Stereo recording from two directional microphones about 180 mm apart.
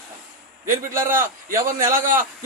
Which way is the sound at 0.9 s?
50° right (ahead or behind).